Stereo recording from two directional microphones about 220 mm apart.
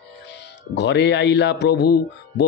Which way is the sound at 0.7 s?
50° left (ahead or behind).